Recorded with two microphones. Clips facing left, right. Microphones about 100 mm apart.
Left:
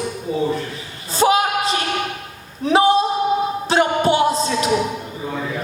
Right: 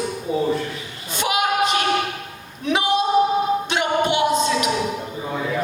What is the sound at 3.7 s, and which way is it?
Music, 35° left (ahead or behind).